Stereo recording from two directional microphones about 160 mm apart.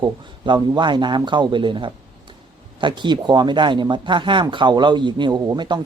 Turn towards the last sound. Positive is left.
turn(degrees=-25)  # may be behind; listen again after turning